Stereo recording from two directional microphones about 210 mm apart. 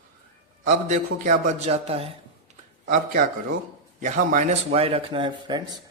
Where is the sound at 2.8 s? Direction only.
40° right (ahead or behind).